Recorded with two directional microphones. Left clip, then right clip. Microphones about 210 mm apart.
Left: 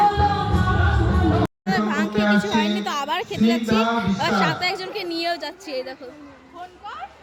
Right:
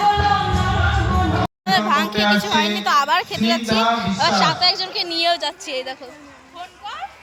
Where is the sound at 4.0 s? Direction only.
5° left (ahead or behind).